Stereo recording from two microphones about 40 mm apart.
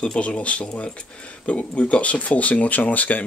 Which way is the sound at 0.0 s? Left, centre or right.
Left.